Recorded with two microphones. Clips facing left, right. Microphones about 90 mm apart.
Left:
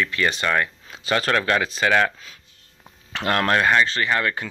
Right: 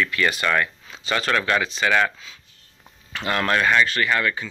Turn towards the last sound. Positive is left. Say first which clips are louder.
# even
turn(degrees=30)  # may be behind; listen again after turning